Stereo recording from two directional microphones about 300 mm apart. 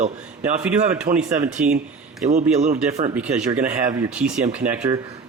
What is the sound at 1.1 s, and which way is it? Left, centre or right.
Speech, right.